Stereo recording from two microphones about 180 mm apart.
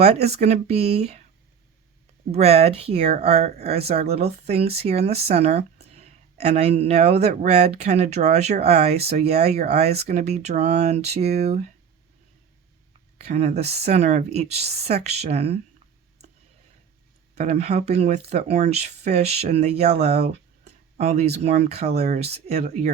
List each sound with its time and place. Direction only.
0.0 s speech: 35° right (ahead or behind)
2.3 s speech: 35° right (ahead or behind)
13.1 s speech: 35° right (ahead or behind)
17.3 s speech: 35° right (ahead or behind)
20.7 s a sound: 40° right (ahead or behind)
21.4 s speech: 35° right (ahead or behind)